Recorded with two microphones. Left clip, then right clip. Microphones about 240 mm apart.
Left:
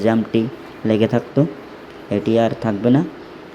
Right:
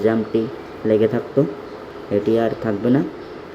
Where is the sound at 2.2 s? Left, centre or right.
Centre.